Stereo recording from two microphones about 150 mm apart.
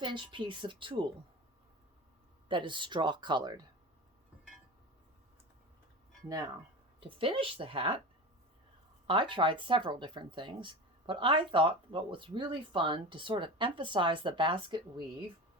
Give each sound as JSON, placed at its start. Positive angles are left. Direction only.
{"t": 0.0, "sound": "speech", "side_deg": -30}
{"t": 2.5, "sound": "speech", "side_deg": -35}
{"t": 7.0, "sound": "speech", "side_deg": -35}
{"t": 9.0, "sound": "speech", "side_deg": -35}